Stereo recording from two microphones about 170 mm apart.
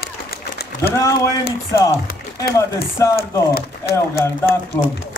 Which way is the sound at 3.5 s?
65° left (ahead or behind).